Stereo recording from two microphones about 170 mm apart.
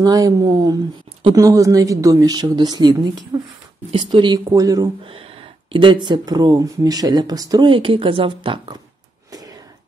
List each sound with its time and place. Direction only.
0.0 s speech: 20° right (ahead or behind)
5.1 s speech: 35° right (ahead or behind)
9.3 s a sound: 20° right (ahead or behind)